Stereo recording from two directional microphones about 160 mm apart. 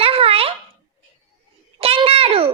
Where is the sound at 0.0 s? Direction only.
35° right (ahead or behind).